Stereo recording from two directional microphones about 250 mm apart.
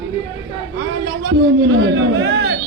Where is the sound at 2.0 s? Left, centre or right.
Right.